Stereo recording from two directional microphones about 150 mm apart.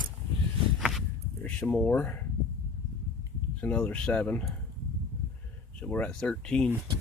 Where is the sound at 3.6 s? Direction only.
10° left (ahead or behind).